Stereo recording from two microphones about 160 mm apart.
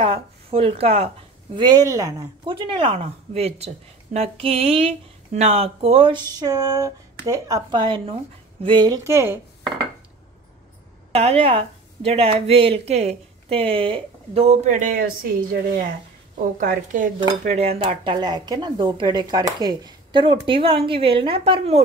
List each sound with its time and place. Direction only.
0.0 s speech: 35° right (ahead or behind)
3.0 s speech: 40° right (ahead or behind); by 9.7 s 15° right (ahead or behind)
11.1 s speech: 40° right (ahead or behind); by 15.9 s 65° right (ahead or behind)
16.5 s a woman's voice: 55° right (ahead or behind)
17.5 s speech: 40° right (ahead or behind)